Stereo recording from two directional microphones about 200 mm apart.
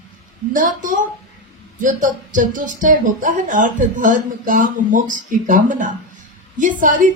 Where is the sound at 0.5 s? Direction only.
40° right (ahead or behind).